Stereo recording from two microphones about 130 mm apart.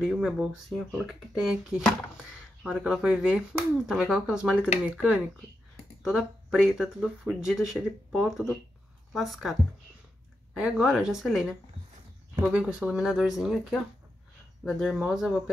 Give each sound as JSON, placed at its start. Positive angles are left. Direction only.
{"t": 0.0, "sound": "speech", "side_deg": -5}
{"t": 10.6, "sound": "speech", "side_deg": -5}
{"t": 12.5, "sound": "speech", "side_deg": -10}